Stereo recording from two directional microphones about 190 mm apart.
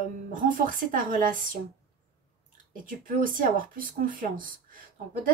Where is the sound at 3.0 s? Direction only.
45° right (ahead or behind).